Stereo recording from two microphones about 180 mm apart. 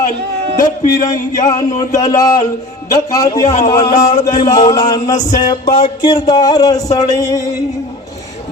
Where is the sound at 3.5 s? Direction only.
40° left (ahead or behind).